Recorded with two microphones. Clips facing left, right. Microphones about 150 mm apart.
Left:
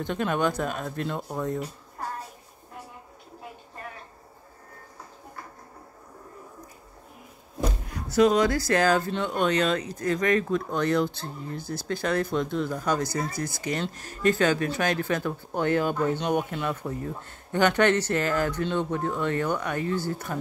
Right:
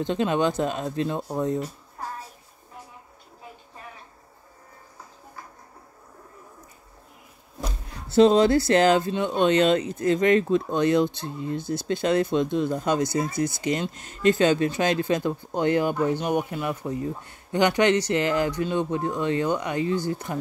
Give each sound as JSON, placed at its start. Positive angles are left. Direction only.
{"t": 0.0, "sound": "speech", "side_deg": -20}
{"t": 8.1, "sound": "speech", "side_deg": -30}